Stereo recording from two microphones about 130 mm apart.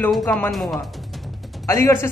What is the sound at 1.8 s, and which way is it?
Speech, 20° left (ahead or behind).